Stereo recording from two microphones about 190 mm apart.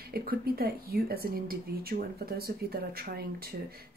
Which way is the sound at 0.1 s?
50° right (ahead or behind).